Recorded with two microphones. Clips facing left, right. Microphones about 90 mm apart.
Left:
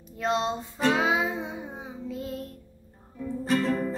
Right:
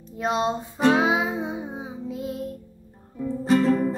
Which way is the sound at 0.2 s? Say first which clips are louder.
Right 3 dB; 15° right (ahead or behind).